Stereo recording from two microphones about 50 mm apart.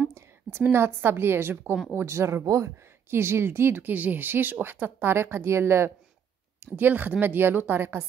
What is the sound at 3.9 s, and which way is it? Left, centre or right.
Speech, right.